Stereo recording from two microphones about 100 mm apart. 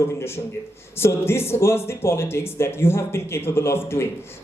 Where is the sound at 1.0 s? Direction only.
25° left (ahead or behind).